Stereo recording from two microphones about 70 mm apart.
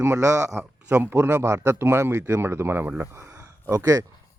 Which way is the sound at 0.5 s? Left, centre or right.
Right.